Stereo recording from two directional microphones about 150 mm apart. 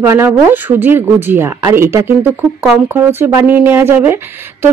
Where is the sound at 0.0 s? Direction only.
15° right (ahead or behind).